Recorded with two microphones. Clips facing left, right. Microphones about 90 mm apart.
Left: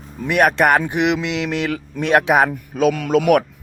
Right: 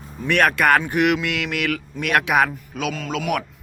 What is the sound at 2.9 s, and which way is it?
Speech, 55° left (ahead or behind).